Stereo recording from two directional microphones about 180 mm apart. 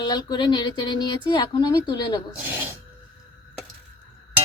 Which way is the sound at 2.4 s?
10° right (ahead or behind).